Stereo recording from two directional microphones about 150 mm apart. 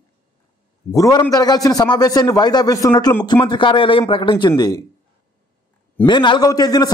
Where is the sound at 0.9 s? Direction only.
25° left (ahead or behind).